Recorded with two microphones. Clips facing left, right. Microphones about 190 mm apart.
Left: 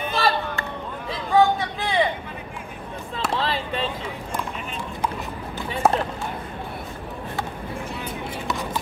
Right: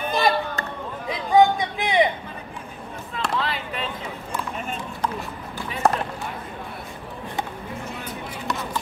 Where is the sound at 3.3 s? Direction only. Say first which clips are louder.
Left 3 dB; 30° left (ahead or behind).